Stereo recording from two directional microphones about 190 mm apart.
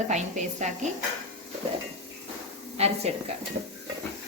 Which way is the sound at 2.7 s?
35° right (ahead or behind).